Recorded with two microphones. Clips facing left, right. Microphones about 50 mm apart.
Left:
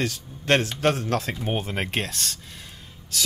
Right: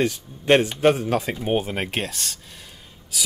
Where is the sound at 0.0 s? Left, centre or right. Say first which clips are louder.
Right 5 dB; centre.